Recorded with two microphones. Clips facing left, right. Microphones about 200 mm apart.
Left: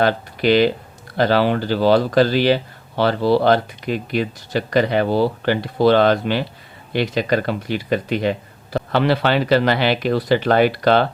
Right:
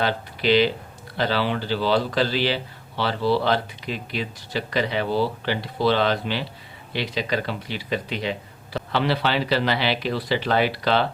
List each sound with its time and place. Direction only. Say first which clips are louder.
0.0 s speech: left 6 dB; 50° left (ahead or behind)